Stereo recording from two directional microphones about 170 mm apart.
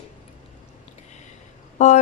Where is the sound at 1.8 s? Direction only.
45° left (ahead or behind).